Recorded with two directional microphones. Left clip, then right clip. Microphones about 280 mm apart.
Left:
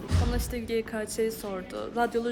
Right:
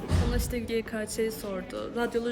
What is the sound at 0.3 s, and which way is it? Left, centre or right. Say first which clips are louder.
Speech: left 1 dB; centre.